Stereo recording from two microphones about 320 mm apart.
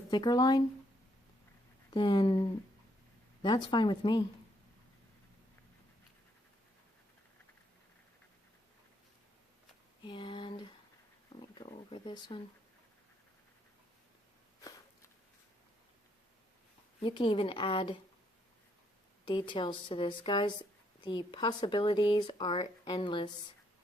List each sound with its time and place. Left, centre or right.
0.1 s speech: centre
1.9 s speech: centre
10.0 s a sound: centre
17.0 s speech: centre
19.2 s speech: centre